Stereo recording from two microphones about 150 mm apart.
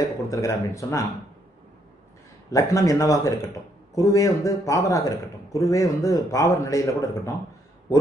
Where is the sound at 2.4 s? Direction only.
20° left (ahead or behind).